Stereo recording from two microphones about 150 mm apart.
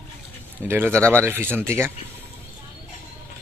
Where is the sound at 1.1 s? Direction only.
15° right (ahead or behind).